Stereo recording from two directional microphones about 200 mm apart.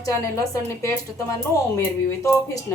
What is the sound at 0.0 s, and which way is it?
Speech, 15° left (ahead or behind).